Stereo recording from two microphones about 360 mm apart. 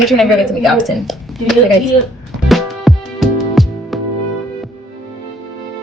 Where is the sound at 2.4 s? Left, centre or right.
Centre.